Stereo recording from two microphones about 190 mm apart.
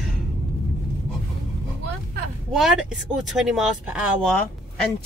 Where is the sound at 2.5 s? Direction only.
5° right (ahead or behind).